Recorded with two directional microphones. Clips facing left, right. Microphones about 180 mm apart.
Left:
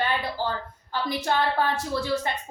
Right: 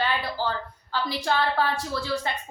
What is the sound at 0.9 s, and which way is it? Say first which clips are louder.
Speech: even; 20° left (ahead or behind).